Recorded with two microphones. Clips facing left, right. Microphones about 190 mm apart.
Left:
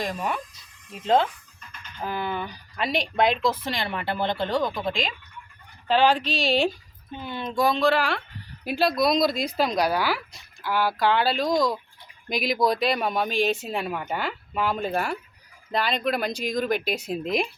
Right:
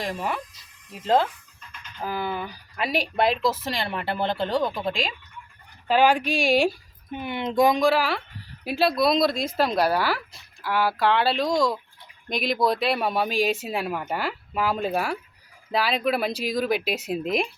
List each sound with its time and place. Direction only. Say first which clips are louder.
0.0 s speech: even; centre (ahead or behind)